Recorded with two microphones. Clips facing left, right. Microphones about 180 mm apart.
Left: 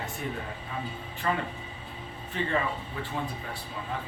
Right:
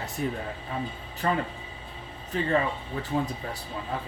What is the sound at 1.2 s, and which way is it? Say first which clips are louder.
A man's voice: right 3 dB; 35° right (ahead or behind).